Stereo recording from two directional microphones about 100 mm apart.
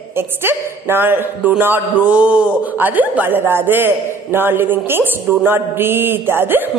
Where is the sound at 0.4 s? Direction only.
20° right (ahead or behind).